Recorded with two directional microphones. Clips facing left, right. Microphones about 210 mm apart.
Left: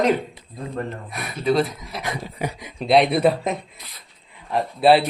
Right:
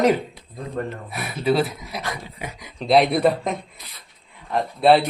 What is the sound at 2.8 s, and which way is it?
Speech, centre (ahead or behind).